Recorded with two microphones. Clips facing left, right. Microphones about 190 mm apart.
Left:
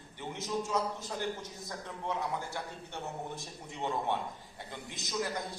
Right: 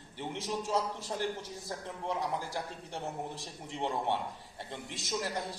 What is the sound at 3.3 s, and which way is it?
Speech, 30° right (ahead or behind).